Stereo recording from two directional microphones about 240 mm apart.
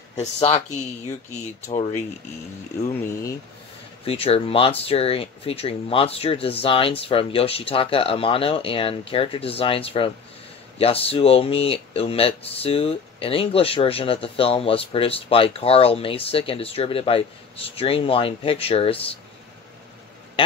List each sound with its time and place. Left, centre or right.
0.2 s speech: left
4.0 s speech: left